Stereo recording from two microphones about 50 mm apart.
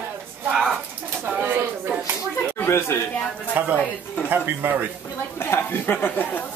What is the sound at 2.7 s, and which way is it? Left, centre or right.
Speech, left.